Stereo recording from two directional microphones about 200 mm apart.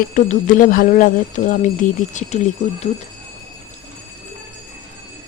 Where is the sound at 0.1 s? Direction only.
40° left (ahead or behind).